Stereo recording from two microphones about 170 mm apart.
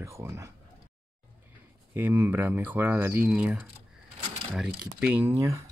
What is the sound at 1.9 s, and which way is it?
Speech, 15° right (ahead or behind).